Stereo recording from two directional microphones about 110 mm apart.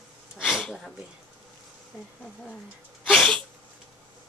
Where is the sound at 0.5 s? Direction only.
5° left (ahead or behind).